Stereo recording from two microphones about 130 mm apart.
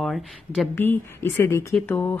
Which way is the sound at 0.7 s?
15° left (ahead or behind).